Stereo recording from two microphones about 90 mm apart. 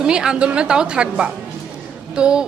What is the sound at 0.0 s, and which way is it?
A woman's voice, 10° right (ahead or behind).